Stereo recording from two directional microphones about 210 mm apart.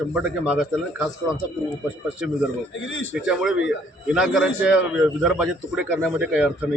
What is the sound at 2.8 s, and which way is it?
Speech, 65° left (ahead or behind).